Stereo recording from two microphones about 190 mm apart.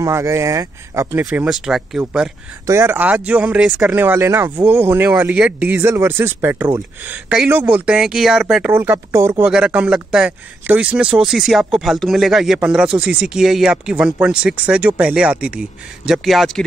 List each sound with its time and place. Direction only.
0.0 s speech: 15° right (ahead or behind)
1.2 s speech: 5° right (ahead or behind)
2.6 s speech: 15° right (ahead or behind); by 16.6 s centre (ahead or behind)